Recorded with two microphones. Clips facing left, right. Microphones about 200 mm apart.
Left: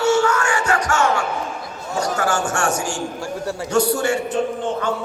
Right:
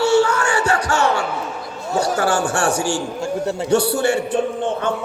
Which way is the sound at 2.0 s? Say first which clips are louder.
Right 3 dB; 30° right (ahead or behind).